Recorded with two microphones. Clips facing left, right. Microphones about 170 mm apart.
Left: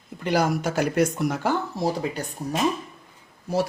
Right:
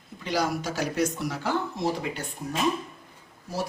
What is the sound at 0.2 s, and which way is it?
Speech, 55° left (ahead or behind).